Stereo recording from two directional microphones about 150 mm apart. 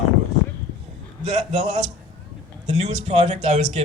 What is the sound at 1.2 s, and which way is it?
Speech, 50° right (ahead or behind).